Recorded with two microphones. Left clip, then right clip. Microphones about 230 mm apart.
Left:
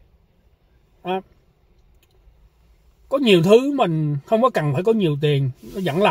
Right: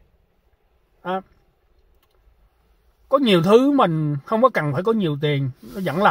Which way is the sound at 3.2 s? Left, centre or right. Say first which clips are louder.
Left 2 dB; centre.